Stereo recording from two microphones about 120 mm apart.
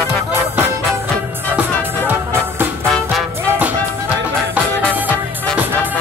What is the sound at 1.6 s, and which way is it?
Music, 15° right (ahead or behind).